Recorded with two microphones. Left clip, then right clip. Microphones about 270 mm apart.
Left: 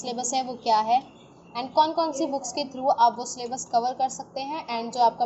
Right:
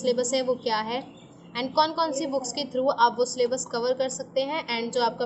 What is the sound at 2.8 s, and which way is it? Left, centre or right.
A woman's voice, centre.